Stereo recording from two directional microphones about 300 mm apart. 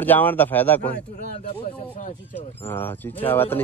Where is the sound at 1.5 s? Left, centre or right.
Left.